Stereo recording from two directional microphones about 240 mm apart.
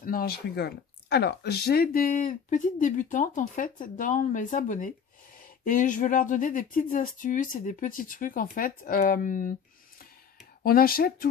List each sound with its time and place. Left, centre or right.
0.0 s speech: left
10.6 s speech: left